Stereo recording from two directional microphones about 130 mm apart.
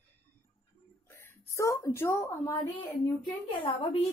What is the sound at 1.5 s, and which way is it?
A woman's voice, 25° left (ahead or behind).